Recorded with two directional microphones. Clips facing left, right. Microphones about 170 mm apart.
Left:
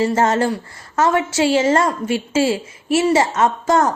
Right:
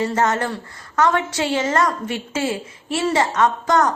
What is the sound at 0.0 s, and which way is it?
A woman's voice, 25° left (ahead or behind).